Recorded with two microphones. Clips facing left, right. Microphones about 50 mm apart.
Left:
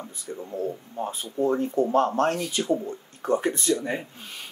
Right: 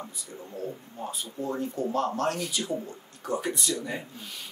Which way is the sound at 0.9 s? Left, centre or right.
Left.